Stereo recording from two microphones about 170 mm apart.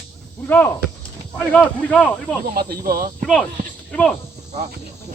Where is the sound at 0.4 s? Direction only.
15° left (ahead or behind).